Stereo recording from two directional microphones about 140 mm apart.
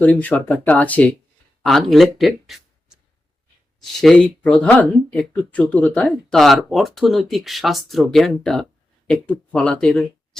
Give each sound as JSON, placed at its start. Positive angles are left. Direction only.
{"t": 0.0, "sound": "speech", "side_deg": 10}